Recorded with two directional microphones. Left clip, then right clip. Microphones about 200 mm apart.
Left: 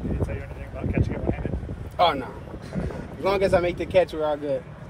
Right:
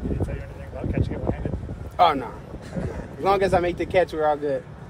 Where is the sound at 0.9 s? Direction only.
45° right (ahead or behind).